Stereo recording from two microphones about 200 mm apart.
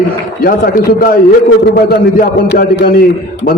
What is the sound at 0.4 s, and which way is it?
A man's voice, 45° left (ahead or behind).